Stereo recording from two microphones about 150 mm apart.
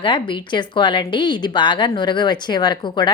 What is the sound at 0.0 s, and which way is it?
A woman's voice, 30° left (ahead or behind).